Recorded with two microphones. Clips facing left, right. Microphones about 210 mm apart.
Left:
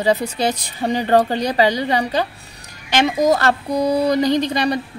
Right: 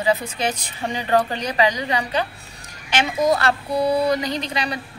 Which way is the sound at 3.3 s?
40° left (ahead or behind).